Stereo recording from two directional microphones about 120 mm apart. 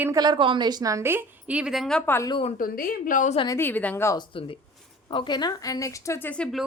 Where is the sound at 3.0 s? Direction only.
90° left.